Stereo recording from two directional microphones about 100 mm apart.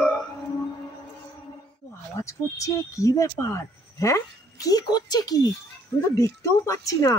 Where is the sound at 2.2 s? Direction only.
30° left (ahead or behind).